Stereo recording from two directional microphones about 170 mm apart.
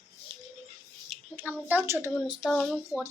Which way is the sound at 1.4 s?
10° right (ahead or behind).